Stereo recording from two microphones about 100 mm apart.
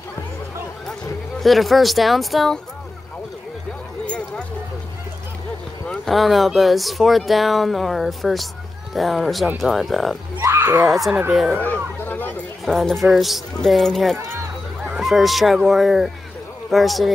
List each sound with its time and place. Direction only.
1.4 s speech: centre (ahead or behind)
5.9 s speech: centre (ahead or behind)
10.4 s a sound: 25° right (ahead or behind)
10.9 s speech: 5° right (ahead or behind)
11.5 s chatter: 15° left (ahead or behind)
12.6 s speech: 5° left (ahead or behind)
14.9 s goose: 5° right (ahead or behind)
16.7 s speech: centre (ahead or behind)